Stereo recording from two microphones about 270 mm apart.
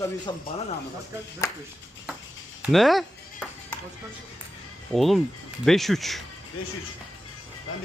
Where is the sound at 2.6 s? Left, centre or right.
Centre.